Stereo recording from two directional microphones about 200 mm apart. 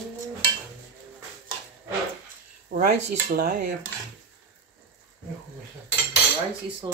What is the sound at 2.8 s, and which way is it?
Speech, 50° right (ahead or behind).